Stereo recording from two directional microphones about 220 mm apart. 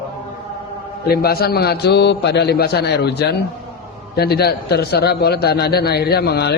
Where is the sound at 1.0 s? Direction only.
45° left (ahead or behind).